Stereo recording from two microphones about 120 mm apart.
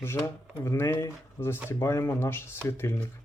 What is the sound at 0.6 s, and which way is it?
Speech, 20° left (ahead or behind).